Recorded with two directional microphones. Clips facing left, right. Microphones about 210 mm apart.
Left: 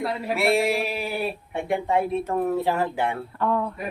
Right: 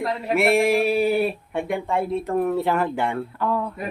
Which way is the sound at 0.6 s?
50° right (ahead or behind).